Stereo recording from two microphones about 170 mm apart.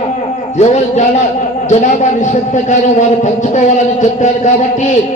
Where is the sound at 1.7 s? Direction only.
45° left (ahead or behind).